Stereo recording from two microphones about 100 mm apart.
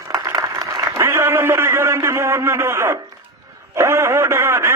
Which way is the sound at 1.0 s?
25° right (ahead or behind).